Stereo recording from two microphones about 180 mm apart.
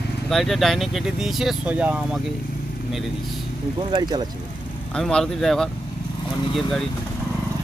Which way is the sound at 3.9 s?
25° right (ahead or behind).